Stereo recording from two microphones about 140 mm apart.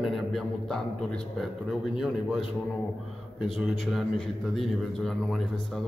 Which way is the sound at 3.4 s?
Centre (ahead or behind).